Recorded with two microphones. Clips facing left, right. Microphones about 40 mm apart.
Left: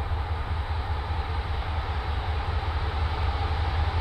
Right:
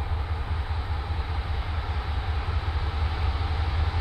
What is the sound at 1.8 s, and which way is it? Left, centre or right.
Vehicle, centre.